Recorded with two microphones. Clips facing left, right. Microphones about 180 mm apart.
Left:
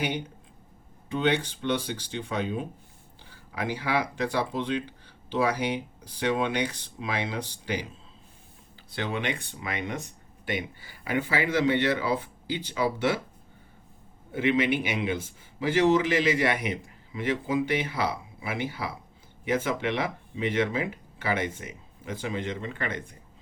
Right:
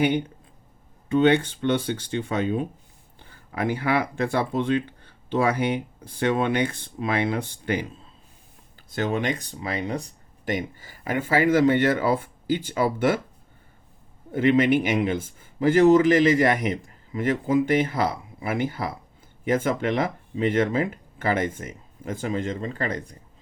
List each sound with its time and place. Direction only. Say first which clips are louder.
0.0 s speech: right 8 dB; 55° right (ahead or behind)
8.9 s a man's voice: right 5 dB; 45° right (ahead or behind)
14.3 s a man's voice: right 6 dB; 50° right (ahead or behind)